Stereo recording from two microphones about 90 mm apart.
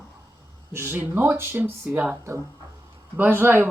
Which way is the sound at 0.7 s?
25° right (ahead or behind).